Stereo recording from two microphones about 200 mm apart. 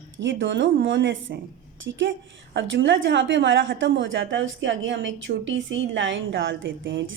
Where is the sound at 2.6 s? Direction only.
65° right (ahead or behind).